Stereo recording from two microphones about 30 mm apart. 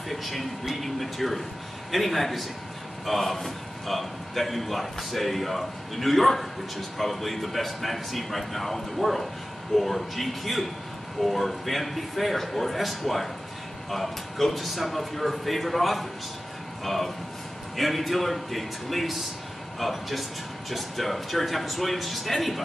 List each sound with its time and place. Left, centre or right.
0.1 s a man's voice: centre